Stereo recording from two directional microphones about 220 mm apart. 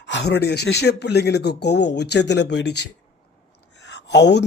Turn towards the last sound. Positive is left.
turn(degrees=50)  # may be behind; listen again after turning